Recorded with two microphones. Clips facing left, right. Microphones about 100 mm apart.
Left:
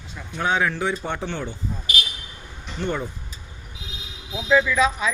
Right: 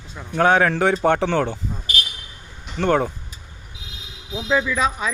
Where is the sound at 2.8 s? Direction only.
80° right.